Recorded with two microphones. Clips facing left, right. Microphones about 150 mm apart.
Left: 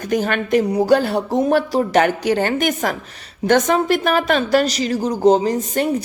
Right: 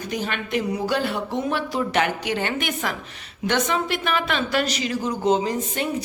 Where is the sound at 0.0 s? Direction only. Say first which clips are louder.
Left 8 dB; 45° left (ahead or behind).